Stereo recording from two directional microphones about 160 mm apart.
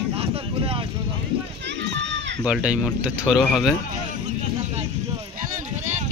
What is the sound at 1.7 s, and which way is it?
Run, 90° right.